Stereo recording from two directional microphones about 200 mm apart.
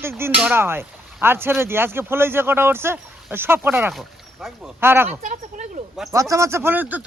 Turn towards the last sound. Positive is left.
turn(degrees=-10)  # may be behind; listen again after turning